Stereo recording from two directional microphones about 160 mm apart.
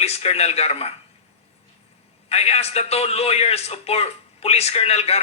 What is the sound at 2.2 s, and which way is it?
A man's voice, 40° left (ahead or behind).